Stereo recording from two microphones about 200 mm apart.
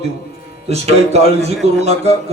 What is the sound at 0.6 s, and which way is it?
Speech, 30° right (ahead or behind).